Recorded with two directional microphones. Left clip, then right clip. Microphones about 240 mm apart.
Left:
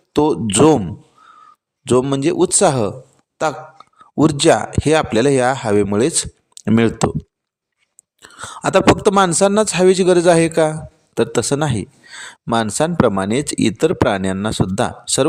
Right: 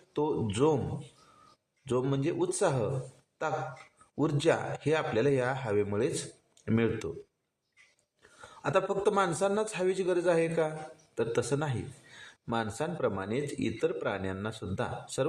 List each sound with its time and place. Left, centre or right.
0.1 s a man's voice: left
8.2 s a man's voice: left